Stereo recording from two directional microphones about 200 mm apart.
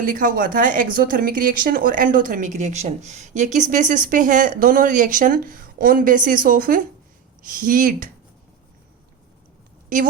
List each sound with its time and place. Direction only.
0.0 s a woman's voice: 45° right (ahead or behind)